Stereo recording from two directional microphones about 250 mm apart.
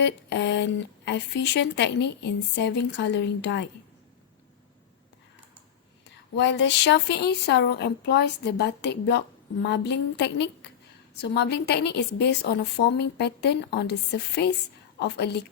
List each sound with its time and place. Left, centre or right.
0.0 s speech: left
6.3 s a woman's voice: left
14.9 s a woman's voice: left